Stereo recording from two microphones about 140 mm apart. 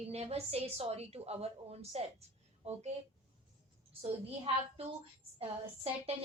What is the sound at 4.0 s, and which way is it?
Speech, 40° right (ahead or behind).